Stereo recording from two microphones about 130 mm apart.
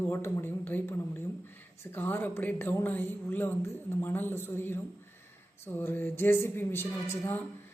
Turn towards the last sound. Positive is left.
turn(degrees=15)  # may be behind; listen again after turning